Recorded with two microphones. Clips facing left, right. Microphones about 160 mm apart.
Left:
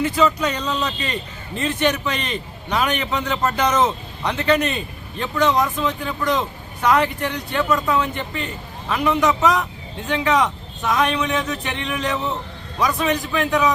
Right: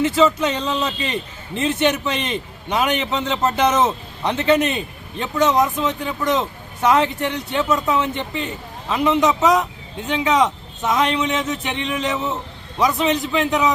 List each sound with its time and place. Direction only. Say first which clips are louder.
0.0 s a man's voice: right 2 dB; 25° right (ahead or behind)
12.1 s a man's voice: right 1 dB; 5° right (ahead or behind)
12.8 s a man's voice: right 2 dB; 20° right (ahead or behind)